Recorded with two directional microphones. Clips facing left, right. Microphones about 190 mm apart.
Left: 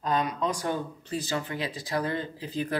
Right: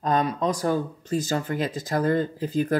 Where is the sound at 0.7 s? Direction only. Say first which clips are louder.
Right 6 dB; 45° right (ahead or behind).